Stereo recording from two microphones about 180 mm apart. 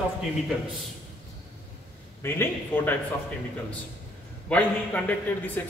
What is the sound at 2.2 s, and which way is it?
Speech, 10° left (ahead or behind).